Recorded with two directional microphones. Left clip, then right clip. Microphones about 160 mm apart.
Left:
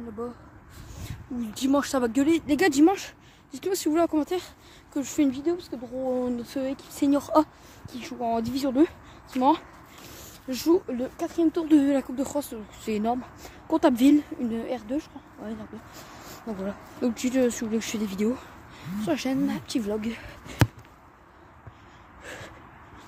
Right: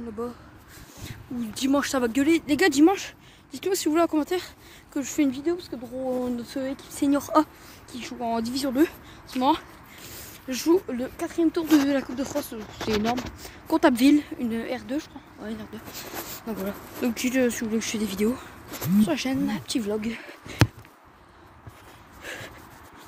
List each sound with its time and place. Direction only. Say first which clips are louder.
1.0 s speech: right 1 dB; 5° left (ahead or behind)
3.5 s speech: right 1 dB; 15° left (ahead or behind)
7.9 s speech: left 1 dB; 15° left (ahead or behind)
13.7 s speech: right 1 dB; 5° left (ahead or behind)
15.9 s a sound: right 6 dB; 15° left (ahead or behind)
17.0 s speech: even; 15° left (ahead or behind)
22.2 s a sound: right 3 dB; 10° left (ahead or behind)